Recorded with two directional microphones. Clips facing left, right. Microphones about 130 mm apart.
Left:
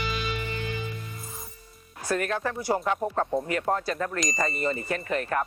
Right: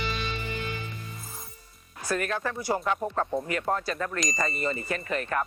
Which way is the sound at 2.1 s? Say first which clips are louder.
Left 2 dB; 35° left (ahead or behind).